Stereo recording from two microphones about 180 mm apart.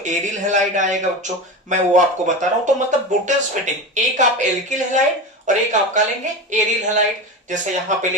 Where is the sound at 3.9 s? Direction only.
45° right (ahead or behind).